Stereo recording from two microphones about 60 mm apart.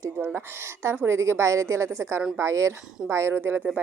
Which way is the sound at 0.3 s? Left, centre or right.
Right.